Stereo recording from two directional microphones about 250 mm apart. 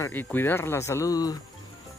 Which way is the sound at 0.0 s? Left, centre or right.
Centre.